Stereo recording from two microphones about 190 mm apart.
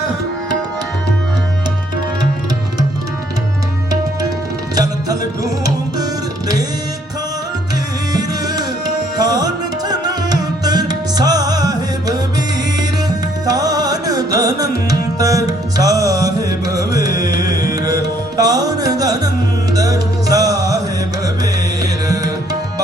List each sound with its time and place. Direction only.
4.7 s music: 20° right (ahead or behind)
8.1 s music: 20° right (ahead or behind)
9.1 s tabla: 20° right (ahead or behind)
13.1 s music: 20° right (ahead or behind)